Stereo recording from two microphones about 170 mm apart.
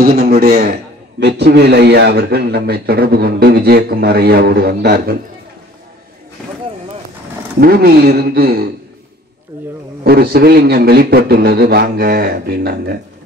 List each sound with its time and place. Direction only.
0.0 s a man's voice: 65° right (ahead or behind)
7.6 s a man's voice: 65° right (ahead or behind)
10.0 s a man's voice: 65° right (ahead or behind)